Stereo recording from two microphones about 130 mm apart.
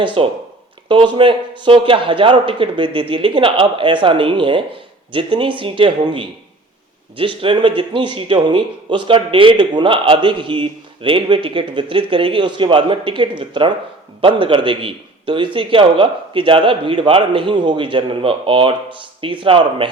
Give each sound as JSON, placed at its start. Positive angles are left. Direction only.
{"t": 0.0, "sound": "a man's voice", "side_deg": -40}